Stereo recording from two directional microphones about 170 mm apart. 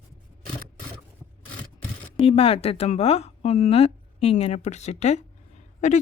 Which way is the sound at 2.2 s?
35° left (ahead or behind).